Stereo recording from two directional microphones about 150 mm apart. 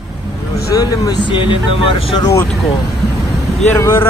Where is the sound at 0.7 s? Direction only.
25° left (ahead or behind).